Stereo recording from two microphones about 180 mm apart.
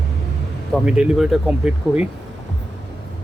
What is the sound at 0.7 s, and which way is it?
Speech, 5° right (ahead or behind).